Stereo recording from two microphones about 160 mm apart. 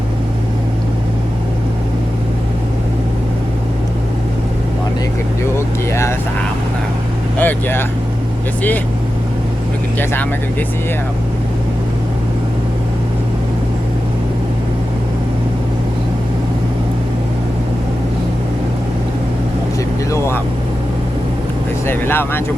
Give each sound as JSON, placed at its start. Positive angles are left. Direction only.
{"t": 5.5, "sound": "vehicle", "side_deg": 15}
{"t": 7.3, "sound": "vehicle", "side_deg": 10}
{"t": 10.0, "sound": "speech", "side_deg": 15}
{"t": 20.1, "sound": "vehicle", "side_deg": 15}
{"t": 21.8, "sound": "vehicle", "side_deg": 15}